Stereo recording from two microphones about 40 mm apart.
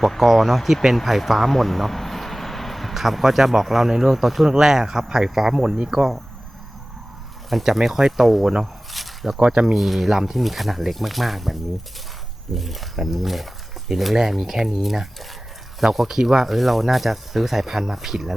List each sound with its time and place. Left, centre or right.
0.0 s speech: centre
7.6 s speech: centre
8.6 s a sound: centre
9.4 s speech: right
9.7 s speech: centre
12.5 s speech: centre